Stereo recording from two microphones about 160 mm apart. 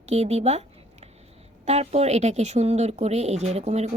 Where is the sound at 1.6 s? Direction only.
45° right (ahead or behind).